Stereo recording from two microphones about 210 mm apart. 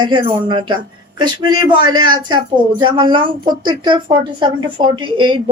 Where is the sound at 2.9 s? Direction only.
20° right (ahead or behind).